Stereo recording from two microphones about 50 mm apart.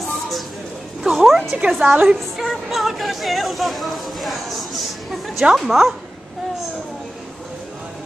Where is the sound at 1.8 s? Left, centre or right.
Right.